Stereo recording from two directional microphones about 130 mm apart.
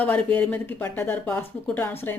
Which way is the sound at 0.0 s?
10° left (ahead or behind).